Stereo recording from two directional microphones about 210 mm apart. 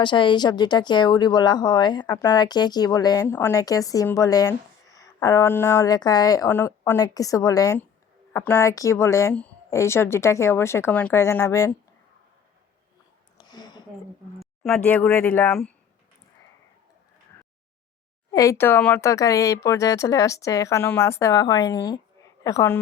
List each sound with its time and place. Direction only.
0.0 s speech: 20° left (ahead or behind)
13.4 s a sound: 20° left (ahead or behind)
14.3 s speech: centre (ahead or behind)
18.3 s speech: 15° left (ahead or behind)